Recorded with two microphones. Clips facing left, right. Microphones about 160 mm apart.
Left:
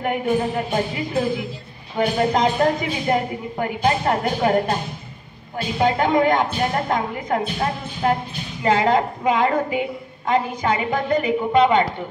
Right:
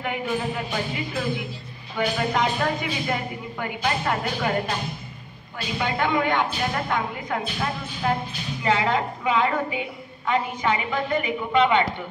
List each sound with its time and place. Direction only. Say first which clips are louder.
0.0 s a woman's voice: left 6 dB; 45° left (ahead or behind)